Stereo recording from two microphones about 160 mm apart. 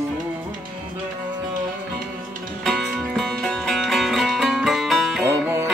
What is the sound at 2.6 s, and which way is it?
Music, centre (ahead or behind).